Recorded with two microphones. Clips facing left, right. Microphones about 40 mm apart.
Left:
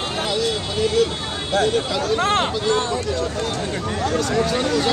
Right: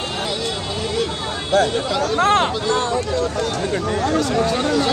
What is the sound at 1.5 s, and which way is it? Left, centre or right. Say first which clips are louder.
Speech: right 2 dB; right.